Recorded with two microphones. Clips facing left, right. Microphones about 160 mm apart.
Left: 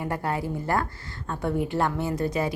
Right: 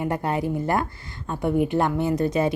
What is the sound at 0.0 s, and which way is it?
A woman's voice, 20° right (ahead or behind).